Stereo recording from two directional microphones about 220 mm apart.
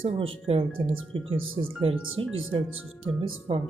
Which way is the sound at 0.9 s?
65° right (ahead or behind).